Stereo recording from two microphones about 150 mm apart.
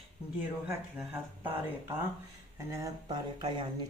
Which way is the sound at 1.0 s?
10° right (ahead or behind).